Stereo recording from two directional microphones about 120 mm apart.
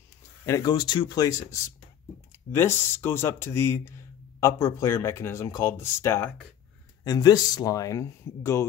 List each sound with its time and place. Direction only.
0.5 s speech: 35° left (ahead or behind)
2.5 s speech: 20° left (ahead or behind)
7.1 s speech: 35° left (ahead or behind)